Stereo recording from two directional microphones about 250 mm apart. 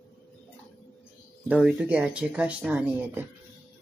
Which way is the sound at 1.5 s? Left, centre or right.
Centre.